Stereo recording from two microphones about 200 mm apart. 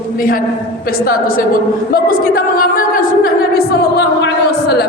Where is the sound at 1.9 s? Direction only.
45° left (ahead or behind).